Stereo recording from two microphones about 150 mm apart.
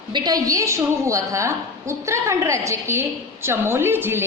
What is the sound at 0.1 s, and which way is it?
A woman's voice, 25° right (ahead or behind).